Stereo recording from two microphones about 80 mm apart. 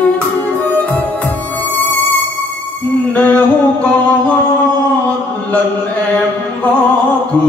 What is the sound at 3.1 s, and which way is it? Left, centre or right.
Music, centre.